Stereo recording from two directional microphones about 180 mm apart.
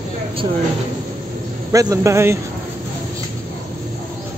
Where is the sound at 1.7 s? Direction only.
20° right (ahead or behind).